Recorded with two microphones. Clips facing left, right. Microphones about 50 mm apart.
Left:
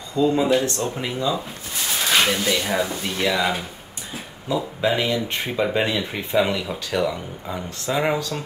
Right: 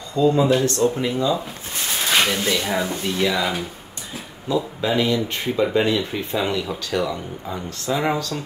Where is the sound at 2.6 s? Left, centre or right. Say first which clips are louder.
Even; centre.